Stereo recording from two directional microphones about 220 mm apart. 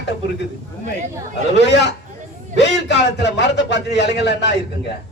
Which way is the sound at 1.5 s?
50° left (ahead or behind).